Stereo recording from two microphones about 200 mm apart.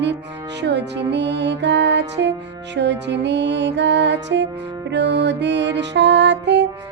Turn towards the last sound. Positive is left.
turn(degrees=-60)  # may be behind; listen again after turning